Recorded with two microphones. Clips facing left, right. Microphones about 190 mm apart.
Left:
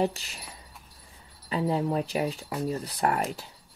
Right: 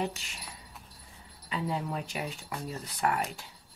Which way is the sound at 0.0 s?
35° left (ahead or behind).